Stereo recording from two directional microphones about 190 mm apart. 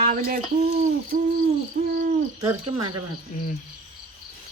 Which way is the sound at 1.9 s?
50° right (ahead or behind).